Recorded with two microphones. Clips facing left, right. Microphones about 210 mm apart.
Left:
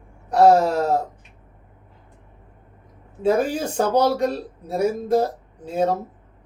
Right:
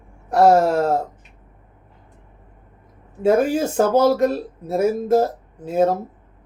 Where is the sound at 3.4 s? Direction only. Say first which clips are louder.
Right 4 dB; 5° right (ahead or behind).